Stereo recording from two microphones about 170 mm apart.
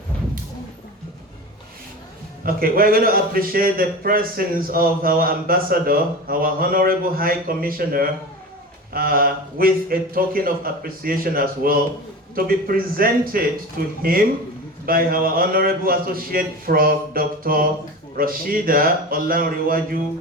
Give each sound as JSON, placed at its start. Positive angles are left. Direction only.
{"t": 2.4, "sound": "a man's voice", "side_deg": -60}